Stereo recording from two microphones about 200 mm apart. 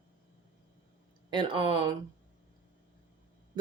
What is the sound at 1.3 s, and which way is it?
Speech, 25° right (ahead or behind).